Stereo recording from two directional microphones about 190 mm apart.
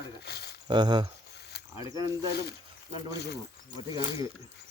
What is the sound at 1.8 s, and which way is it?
Speech, 20° right (ahead or behind).